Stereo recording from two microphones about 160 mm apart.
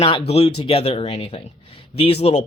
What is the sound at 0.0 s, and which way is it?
Speech, 35° left (ahead or behind).